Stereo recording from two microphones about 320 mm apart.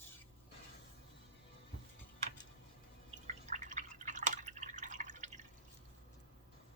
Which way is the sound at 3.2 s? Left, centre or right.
Right.